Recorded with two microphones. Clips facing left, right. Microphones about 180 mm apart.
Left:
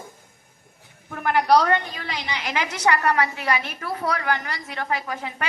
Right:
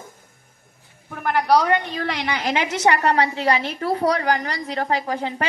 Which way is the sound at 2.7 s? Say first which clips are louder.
Right 2 dB; 25° right (ahead or behind).